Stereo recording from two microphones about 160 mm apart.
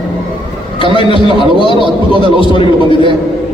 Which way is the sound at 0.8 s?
30° left (ahead or behind).